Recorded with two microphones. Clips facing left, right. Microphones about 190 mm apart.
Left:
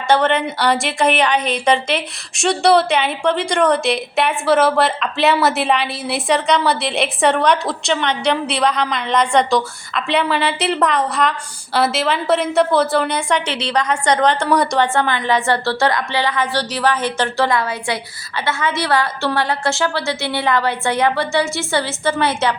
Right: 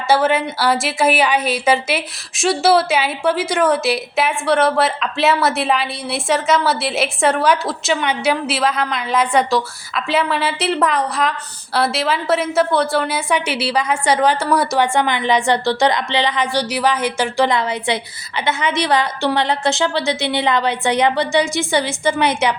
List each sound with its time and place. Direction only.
0.1 s a woman's voice: 5° right (ahead or behind)
14.9 s a woman's voice: 15° right (ahead or behind)